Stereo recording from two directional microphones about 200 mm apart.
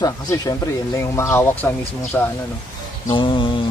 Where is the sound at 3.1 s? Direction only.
25° left (ahead or behind).